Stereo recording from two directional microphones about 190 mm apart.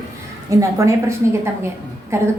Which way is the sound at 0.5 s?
15° right (ahead or behind).